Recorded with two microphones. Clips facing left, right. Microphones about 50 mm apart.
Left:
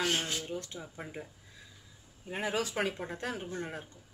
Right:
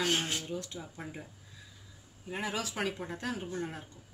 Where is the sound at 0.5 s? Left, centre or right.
Left.